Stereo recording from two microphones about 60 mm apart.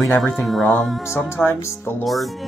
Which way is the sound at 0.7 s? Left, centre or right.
Centre.